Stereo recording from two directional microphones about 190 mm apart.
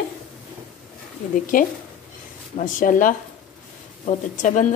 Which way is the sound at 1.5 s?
45° left (ahead or behind).